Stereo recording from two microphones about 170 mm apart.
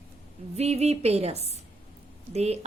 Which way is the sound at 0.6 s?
40° right (ahead or behind).